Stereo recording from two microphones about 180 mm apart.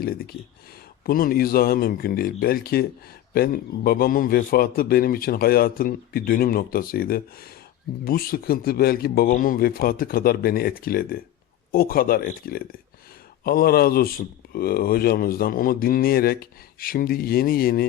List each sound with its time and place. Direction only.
1.0 s speech: 55° left (ahead or behind)